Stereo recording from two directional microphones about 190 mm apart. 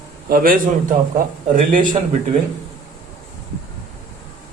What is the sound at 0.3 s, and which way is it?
A man's voice, 50° right (ahead or behind).